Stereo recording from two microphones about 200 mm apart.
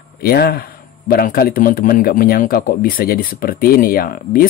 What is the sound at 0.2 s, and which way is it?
A man's voice, 50° left (ahead or behind).